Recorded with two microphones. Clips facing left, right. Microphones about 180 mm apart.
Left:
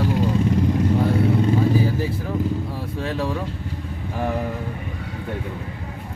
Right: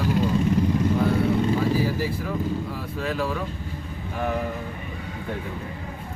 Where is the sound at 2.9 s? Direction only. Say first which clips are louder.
Left 1 dB; 25° left (ahead or behind).